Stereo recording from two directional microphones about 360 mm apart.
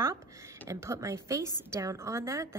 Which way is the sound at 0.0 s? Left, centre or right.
Centre.